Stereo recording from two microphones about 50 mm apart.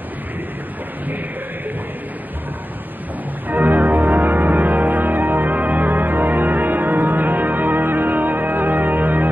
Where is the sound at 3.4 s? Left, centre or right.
Right.